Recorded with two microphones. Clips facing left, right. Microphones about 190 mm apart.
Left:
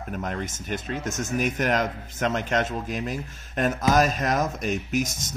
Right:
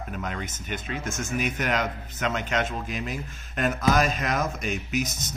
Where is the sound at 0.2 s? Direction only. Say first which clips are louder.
Left 3 dB; 45° left (ahead or behind).